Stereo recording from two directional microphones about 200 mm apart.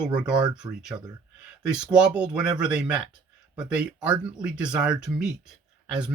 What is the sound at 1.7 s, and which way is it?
Speech, 5° right (ahead or behind).